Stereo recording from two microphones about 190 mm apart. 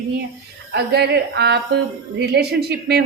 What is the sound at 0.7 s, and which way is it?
A woman's voice, 60° right (ahead or behind).